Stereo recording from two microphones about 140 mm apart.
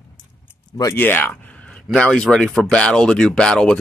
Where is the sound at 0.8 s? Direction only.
20° left (ahead or behind).